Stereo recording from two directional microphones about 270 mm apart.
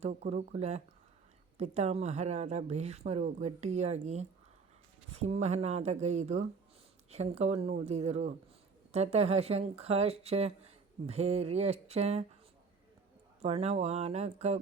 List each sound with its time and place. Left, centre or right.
0.0 s speech: right
13.4 s speech: right